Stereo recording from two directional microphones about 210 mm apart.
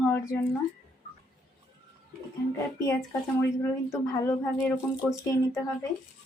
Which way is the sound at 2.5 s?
10° left (ahead or behind).